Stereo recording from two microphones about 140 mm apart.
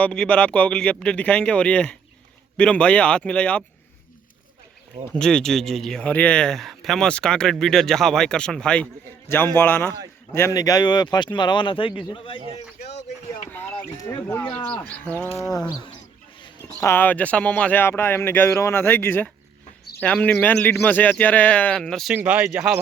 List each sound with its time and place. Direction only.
0.0 s speech: 10° left (ahead or behind)
5.1 s speech: 5° left (ahead or behind)
10.6 s speech: 30° left (ahead or behind)
13.5 s a sound: 15° left (ahead or behind)
14.5 s speech: 10° left (ahead or behind)
15.4 s speech: 25° left (ahead or behind)
16.8 s speech: 15° left (ahead or behind)
22.1 s speech: 15° right (ahead or behind)